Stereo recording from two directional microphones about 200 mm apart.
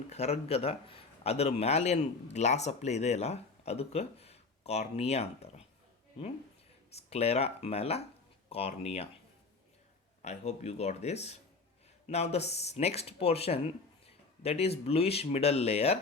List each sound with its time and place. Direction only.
0.1 s speech: 30° left (ahead or behind)
6.9 s speech: 30° left (ahead or behind)
10.2 s speech: 35° left (ahead or behind)